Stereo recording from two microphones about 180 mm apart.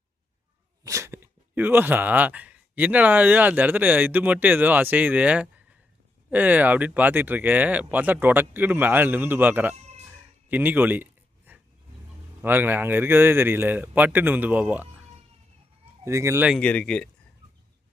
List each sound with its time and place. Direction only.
0.9 s speech: 15° right (ahead or behind)
10.5 s a sound: 10° right (ahead or behind)
12.4 s speech: 10° right (ahead or behind)
16.0 s speech: 15° right (ahead or behind)
16.5 s speech: 5° left (ahead or behind)